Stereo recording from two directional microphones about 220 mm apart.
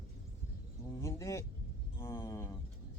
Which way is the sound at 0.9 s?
10° left (ahead or behind).